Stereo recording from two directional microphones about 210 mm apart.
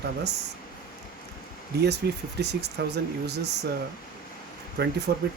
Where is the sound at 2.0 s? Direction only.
50° right (ahead or behind).